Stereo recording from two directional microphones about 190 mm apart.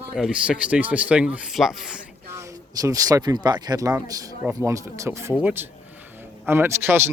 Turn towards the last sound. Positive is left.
turn(degrees=-10)  # may be behind; listen again after turning